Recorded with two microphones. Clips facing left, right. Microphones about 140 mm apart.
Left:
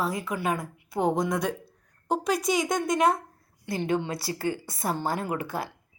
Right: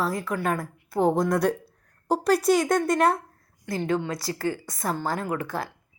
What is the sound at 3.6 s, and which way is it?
A woman's voice, 20° left (ahead or behind).